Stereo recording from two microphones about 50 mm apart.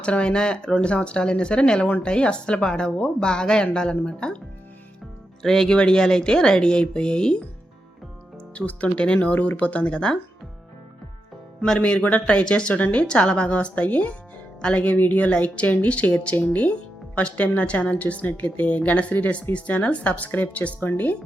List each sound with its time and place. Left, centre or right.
0.0 s a woman's voice: left
5.4 s speech: centre
8.5 s a woman's voice: left
11.8 s a woman's voice: left
20.8 s speech: left